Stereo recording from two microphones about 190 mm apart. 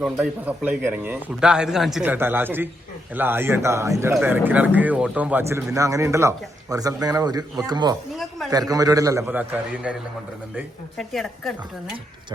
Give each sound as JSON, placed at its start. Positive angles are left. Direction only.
{"t": 0.0, "sound": "a man's voice", "side_deg": -5}
{"t": 8.1, "sound": "a sound", "side_deg": 0}
{"t": 8.4, "sound": "a man's voice", "side_deg": -20}